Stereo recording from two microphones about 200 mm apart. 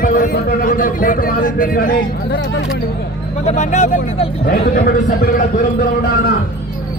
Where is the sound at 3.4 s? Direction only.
35° left (ahead or behind).